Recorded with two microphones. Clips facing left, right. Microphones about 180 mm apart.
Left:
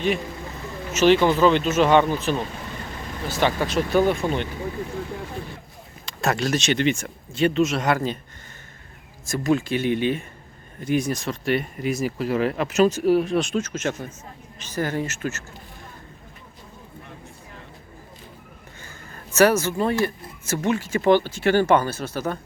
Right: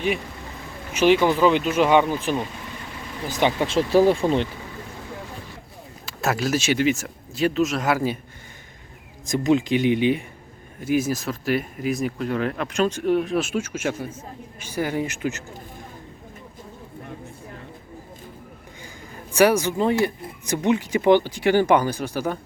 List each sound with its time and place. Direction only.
0.9 s speech: 10° right (ahead or behind); by 4.4 s 30° right (ahead or behind)
6.1 s speech: 5° right (ahead or behind)
9.2 s speech: 20° right (ahead or behind)
18.8 s speech: 15° right (ahead or behind)